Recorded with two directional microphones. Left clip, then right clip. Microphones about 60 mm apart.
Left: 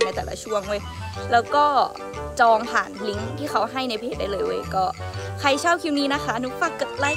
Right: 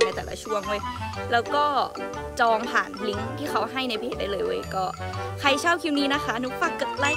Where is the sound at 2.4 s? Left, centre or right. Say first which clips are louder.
Left 4 dB; right.